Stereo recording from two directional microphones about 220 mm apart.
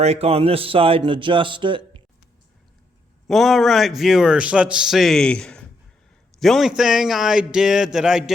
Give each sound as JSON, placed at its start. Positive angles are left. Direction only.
{"t": 0.0, "sound": "speech", "side_deg": -30}
{"t": 3.2, "sound": "a man's voice", "side_deg": 0}